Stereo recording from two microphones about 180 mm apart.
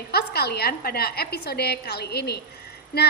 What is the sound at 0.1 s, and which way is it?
A woman's voice, 60° left (ahead or behind).